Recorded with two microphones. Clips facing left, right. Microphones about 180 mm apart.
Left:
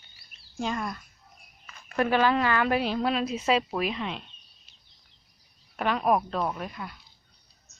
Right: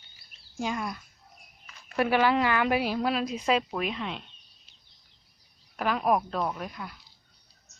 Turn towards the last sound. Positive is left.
turn(degrees=0)  # may be behind; listen again after turning